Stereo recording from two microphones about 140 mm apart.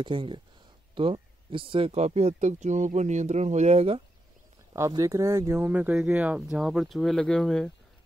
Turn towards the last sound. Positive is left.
turn(degrees=5)  # may be behind; listen again after turning